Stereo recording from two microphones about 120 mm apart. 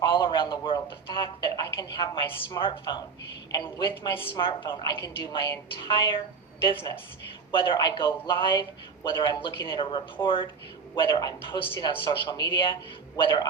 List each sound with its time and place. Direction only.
0.0 s a woman's voice: 40° left (ahead or behind)
10.9 s a woman's voice: 35° left (ahead or behind)